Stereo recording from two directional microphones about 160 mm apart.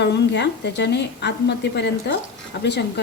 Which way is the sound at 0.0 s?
90° left.